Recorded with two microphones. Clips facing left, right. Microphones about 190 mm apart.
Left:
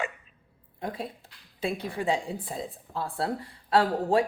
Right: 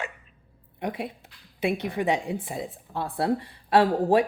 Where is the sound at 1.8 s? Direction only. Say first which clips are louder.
Right 3 dB; 20° right (ahead or behind).